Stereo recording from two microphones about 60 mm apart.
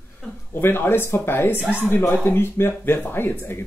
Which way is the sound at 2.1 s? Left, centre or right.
Left.